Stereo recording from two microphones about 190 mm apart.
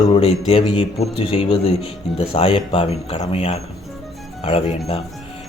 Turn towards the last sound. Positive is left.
turn(degrees=30)  # may be behind; listen again after turning